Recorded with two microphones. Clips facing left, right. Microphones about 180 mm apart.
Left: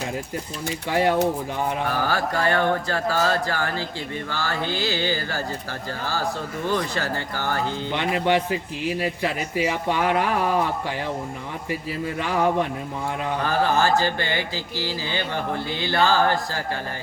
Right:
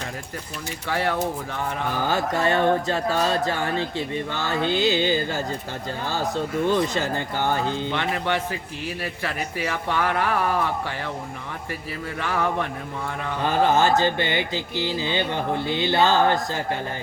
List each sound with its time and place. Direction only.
0.9 s a man's voice: 15° left (ahead or behind)
2.0 s speech: 20° right (ahead or behind)
6.7 s speech: 20° right (ahead or behind)
7.9 s a man's voice: 15° left (ahead or behind)
12.2 s a man's voice: 15° left (ahead or behind)
13.4 s speech: 20° right (ahead or behind)